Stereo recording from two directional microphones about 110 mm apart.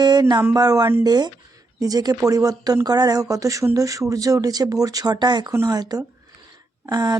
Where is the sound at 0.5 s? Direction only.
35° right (ahead or behind).